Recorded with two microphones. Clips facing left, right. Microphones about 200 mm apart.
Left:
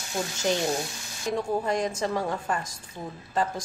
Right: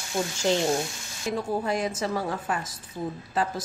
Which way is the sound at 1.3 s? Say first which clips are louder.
Left 1 dB; 5° right (ahead or behind).